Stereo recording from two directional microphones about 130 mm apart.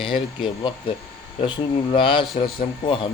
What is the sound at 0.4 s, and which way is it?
Speech, 40° left (ahead or behind).